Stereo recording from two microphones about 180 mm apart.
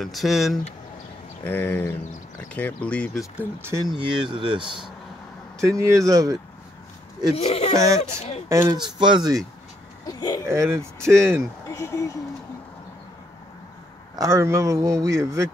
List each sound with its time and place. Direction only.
0.0 s speech: centre (ahead or behind)
1.4 s speech: 10° left (ahead or behind)
3.3 s speech: 15° right (ahead or behind)
4.0 s speech: 25° right (ahead or behind)
5.8 s speech: 20° right (ahead or behind)
7.3 s speech: 35° left (ahead or behind)
7.7 s speech: 20° right (ahead or behind)
8.0 s speech: 35° left (ahead or behind)
8.5 s speech: 15° right (ahead or behind)
10.0 s a sound: 20° left (ahead or behind)
10.4 s speech: 15° right (ahead or behind)
11.7 s speech: 15° left (ahead or behind)
14.1 s speech: 15° right (ahead or behind)